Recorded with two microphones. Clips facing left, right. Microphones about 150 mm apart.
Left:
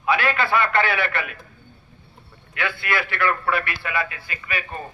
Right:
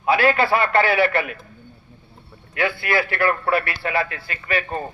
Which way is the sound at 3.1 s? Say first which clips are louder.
Right 1 dB; 35° right (ahead or behind).